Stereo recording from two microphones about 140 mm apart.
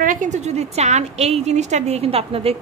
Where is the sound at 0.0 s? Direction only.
70° right (ahead or behind).